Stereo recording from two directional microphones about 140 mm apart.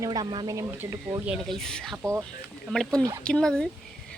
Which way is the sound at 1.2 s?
Centre (ahead or behind).